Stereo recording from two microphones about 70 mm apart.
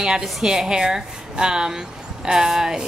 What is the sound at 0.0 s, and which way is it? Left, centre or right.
A woman's voice, centre.